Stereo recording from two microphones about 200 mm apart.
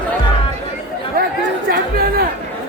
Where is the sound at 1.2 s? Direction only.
45° right (ahead or behind).